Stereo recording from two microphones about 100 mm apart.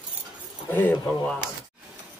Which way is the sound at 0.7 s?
20° left (ahead or behind).